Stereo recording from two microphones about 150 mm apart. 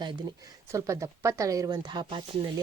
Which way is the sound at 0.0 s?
30° right (ahead or behind).